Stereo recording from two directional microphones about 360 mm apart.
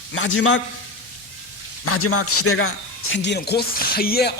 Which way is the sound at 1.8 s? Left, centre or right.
Left.